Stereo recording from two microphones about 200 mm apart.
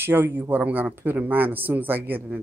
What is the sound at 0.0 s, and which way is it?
Speech, 10° right (ahead or behind).